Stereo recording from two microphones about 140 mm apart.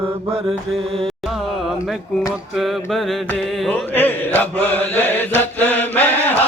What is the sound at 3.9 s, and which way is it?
Chant, 10° left (ahead or behind).